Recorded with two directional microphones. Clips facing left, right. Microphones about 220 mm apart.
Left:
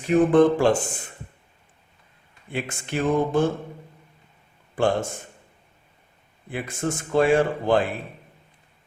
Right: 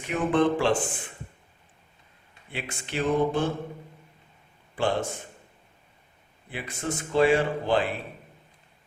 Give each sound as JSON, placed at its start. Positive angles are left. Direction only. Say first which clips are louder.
{"t": 0.1, "sound": "a man's voice", "louder": "left 7 dB", "side_deg": 45}
{"t": 2.5, "sound": "a man's voice", "louder": "left 6 dB", "side_deg": 50}
{"t": 4.7, "sound": "a man's voice", "louder": "left 4 dB", "side_deg": 50}
{"t": 6.5, "sound": "a man's voice", "louder": "left 5 dB", "side_deg": 50}